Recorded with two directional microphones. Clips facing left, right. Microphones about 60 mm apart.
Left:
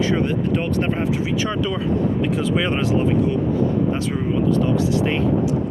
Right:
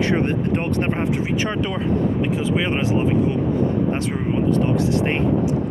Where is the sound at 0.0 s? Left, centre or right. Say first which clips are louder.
Even; right.